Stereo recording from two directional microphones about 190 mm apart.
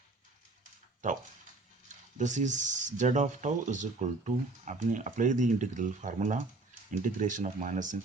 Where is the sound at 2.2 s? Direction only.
40° right (ahead or behind).